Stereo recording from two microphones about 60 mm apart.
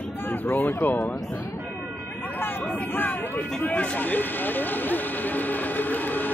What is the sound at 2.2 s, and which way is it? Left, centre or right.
Speech, left.